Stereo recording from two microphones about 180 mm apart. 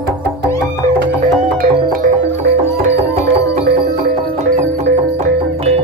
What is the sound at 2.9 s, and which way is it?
Music, 35° right (ahead or behind).